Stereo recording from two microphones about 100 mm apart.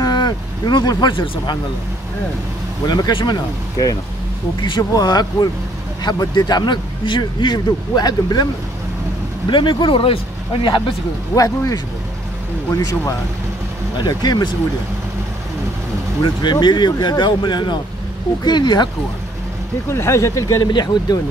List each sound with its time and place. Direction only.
0.0 s speech: 45° left (ahead or behind)
2.9 s a man's voice: 50° left (ahead or behind)
4.6 s a man's voice: 45° left (ahead or behind)
9.5 s a man's voice: 50° left (ahead or behind)
11.3 s a man's voice: 35° left (ahead or behind)
16.2 s a man's voice: 50° left (ahead or behind)
19.9 s speech: 25° left (ahead or behind)